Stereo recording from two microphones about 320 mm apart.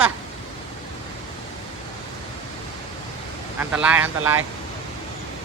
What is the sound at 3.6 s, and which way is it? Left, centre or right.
Speech, centre.